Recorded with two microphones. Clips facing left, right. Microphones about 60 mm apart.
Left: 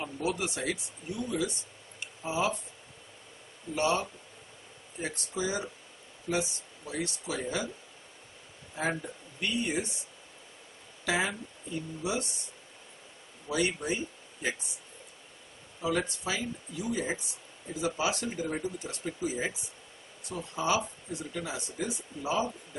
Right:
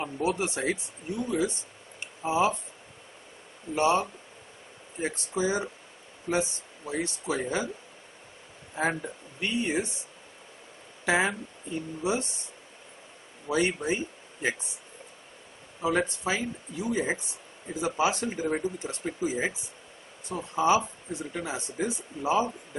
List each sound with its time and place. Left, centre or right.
0.0 s speech: right
2.0 s tick-tock: right
3.7 s speech: right
8.7 s speech: right
11.1 s speech: right
13.5 s speech: right
15.8 s speech: right